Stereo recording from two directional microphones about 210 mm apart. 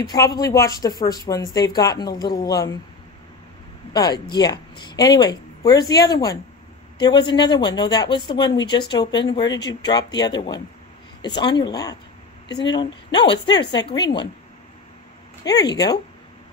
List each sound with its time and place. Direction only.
0.0 s speech: 20° left (ahead or behind)
3.9 s speech: 20° left (ahead or behind)
15.4 s speech: 20° left (ahead or behind)